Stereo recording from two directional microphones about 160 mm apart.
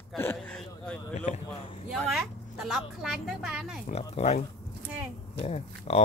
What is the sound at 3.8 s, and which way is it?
Speech, 40° left (ahead or behind).